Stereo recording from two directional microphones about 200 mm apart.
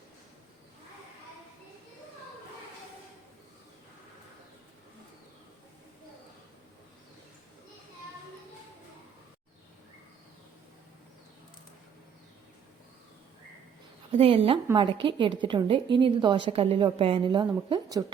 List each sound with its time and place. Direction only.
14.1 s a woman's voice: 25° right (ahead or behind)